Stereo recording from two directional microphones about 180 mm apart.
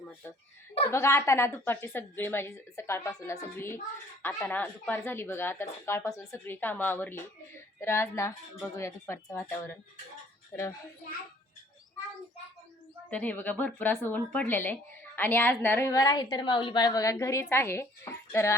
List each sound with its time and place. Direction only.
0.9 s a woman's voice: 15° left (ahead or behind)
13.1 s a woman's voice: 10° left (ahead or behind)